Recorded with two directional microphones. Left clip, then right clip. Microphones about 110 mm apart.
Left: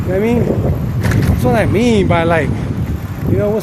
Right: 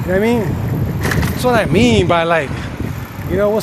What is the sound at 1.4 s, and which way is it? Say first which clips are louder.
Speech: right 1 dB; 20° left (ahead or behind).